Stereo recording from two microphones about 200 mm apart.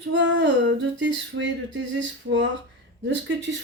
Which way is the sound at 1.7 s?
65° right (ahead or behind).